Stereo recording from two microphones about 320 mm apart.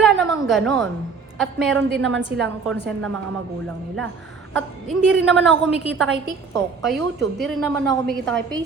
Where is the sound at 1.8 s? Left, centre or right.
Right.